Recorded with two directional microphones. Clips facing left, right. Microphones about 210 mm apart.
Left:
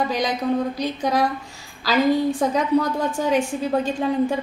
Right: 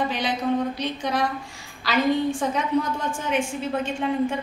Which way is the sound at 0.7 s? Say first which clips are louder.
Left 4 dB; 40° left (ahead or behind).